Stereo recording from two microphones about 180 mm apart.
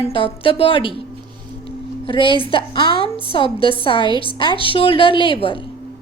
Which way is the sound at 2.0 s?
30° left (ahead or behind).